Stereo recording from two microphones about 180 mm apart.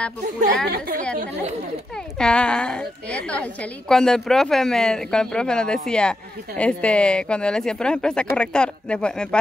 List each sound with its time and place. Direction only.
0.7 s a woman's voice: 55° right (ahead or behind)
2.1 s speech: 5° left (ahead or behind)